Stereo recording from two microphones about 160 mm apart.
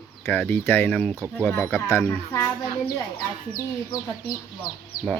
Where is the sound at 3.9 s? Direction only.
25° left (ahead or behind).